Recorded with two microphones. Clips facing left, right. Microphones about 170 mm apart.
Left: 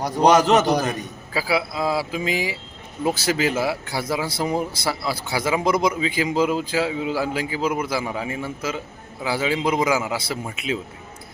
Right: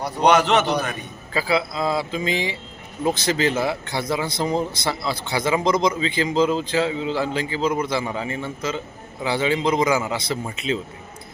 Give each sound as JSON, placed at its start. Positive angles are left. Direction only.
{"t": 0.0, "sound": "a man's voice", "side_deg": 40}
{"t": 1.3, "sound": "speech", "side_deg": 5}